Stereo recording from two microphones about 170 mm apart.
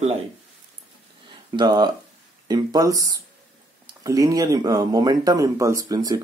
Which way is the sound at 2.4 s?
25° right (ahead or behind).